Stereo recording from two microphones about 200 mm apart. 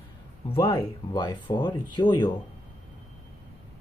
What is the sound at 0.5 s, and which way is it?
Speech, 20° left (ahead or behind).